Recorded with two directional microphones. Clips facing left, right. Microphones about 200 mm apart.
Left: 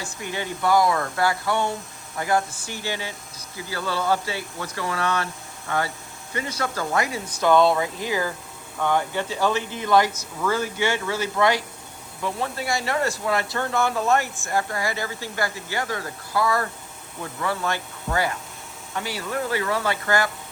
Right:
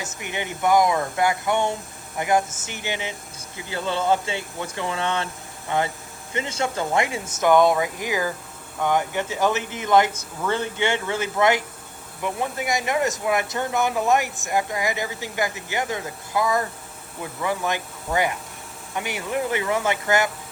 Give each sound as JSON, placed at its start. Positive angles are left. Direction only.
{"t": 0.0, "sound": "speech", "side_deg": -20}